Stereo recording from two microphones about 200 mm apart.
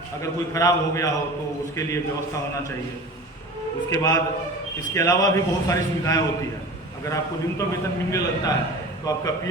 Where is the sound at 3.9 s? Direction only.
15° left (ahead or behind).